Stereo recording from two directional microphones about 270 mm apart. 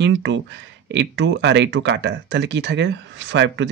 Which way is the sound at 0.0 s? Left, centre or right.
Right.